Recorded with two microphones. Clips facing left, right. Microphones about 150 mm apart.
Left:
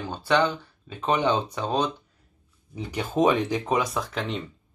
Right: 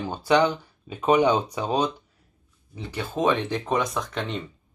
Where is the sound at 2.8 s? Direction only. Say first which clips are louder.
Left 4 dB; 15° left (ahead or behind).